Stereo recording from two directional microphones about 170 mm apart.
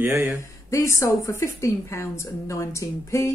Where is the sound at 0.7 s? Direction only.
15° left (ahead or behind).